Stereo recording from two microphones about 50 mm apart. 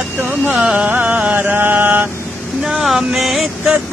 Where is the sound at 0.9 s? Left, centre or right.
Right.